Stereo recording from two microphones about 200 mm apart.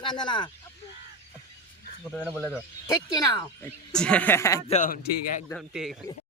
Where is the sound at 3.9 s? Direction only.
5° left (ahead or behind).